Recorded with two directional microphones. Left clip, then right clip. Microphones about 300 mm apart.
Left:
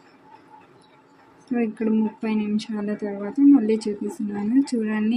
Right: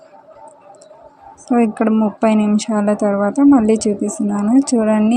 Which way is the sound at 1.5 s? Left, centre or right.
Right.